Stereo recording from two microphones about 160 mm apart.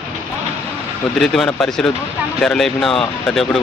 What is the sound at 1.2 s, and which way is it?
Speech, 5° left (ahead or behind).